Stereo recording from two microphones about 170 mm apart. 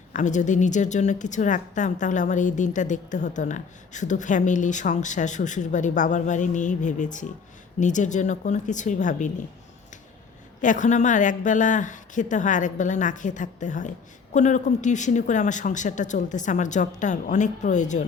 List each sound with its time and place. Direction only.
0.1 s a woman's voice: 45° left (ahead or behind)
10.6 s a woman's voice: 50° left (ahead or behind)